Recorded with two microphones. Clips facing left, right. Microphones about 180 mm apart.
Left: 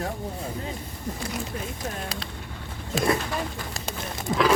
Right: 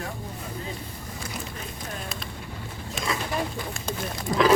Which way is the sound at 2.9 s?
55° left (ahead or behind).